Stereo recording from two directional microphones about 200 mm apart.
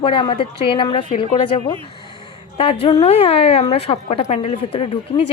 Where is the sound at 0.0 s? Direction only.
25° left (ahead or behind).